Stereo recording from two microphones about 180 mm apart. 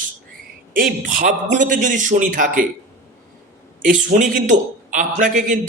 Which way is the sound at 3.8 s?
45° right (ahead or behind).